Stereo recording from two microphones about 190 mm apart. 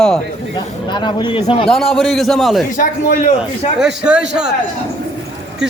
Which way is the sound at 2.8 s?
45° left (ahead or behind).